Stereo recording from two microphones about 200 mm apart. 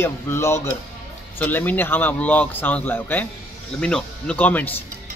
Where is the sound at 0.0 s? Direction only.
15° left (ahead or behind).